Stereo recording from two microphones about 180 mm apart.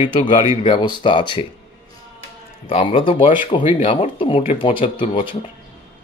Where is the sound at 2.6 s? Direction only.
30° left (ahead or behind).